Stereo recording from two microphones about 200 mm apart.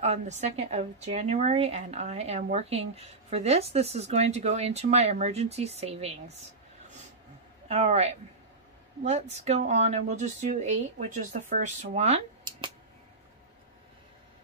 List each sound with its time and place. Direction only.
0.0 s speech: 35° right (ahead or behind)
7.6 s speech: 30° right (ahead or behind)
12.4 s a sound: 25° right (ahead or behind)